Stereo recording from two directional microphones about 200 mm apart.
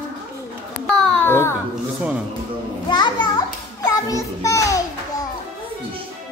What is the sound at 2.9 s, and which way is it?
A child's voice, 20° left (ahead or behind).